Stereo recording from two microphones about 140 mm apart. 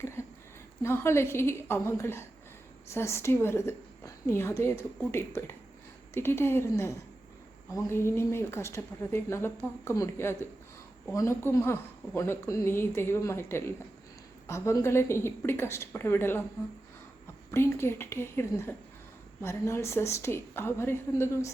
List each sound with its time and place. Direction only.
0.0 s a sound: 20° left (ahead or behind)
0.8 s a woman's voice: 20° left (ahead or behind)
17.5 s a woman's voice: 20° left (ahead or behind)